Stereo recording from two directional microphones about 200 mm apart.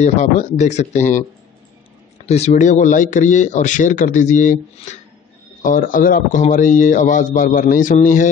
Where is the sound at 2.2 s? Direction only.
35° left (ahead or behind).